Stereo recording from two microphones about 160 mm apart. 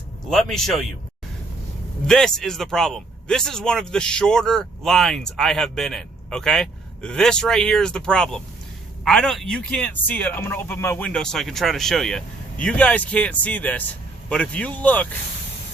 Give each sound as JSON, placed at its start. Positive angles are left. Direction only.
{"t": 0.3, "sound": "speech", "side_deg": 0}
{"t": 2.0, "sound": "speech", "side_deg": 5}